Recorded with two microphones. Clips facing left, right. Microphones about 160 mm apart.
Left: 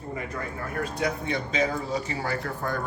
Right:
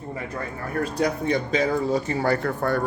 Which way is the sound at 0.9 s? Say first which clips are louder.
Right 6 dB; 40° right (ahead or behind).